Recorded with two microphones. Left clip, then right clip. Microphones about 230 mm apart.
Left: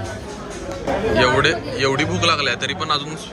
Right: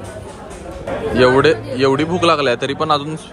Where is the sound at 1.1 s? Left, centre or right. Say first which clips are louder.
Right 6 dB; centre.